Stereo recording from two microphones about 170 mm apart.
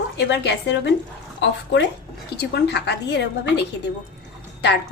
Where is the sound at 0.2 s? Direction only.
90° left.